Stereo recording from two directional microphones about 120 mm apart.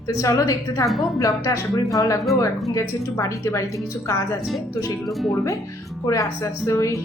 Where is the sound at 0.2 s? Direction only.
30° left (ahead or behind).